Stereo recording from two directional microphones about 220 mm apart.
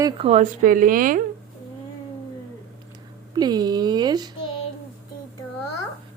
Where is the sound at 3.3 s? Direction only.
20° right (ahead or behind).